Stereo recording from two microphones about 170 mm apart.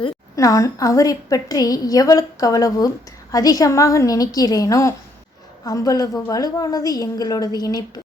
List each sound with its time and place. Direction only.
0.3 s a woman's voice: 20° left (ahead or behind)